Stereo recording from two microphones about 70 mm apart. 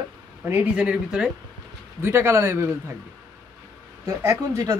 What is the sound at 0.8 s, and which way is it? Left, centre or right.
Speech, centre.